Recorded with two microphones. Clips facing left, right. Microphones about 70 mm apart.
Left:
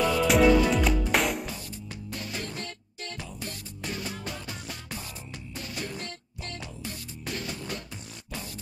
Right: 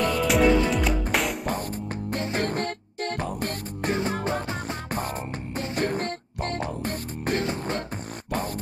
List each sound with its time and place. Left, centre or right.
0.0 s music: centre
2.0 s music: right
3.9 s music: right